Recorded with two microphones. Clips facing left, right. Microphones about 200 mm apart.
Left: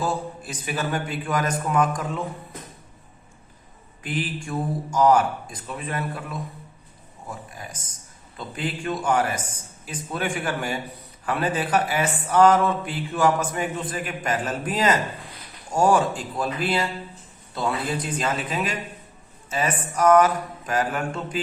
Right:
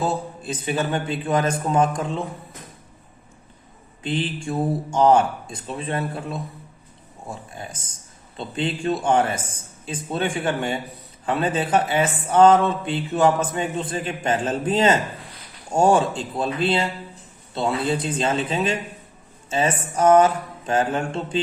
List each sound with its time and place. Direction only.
0.0 s speech: 25° right (ahead or behind)
4.0 s speech: 25° right (ahead or behind)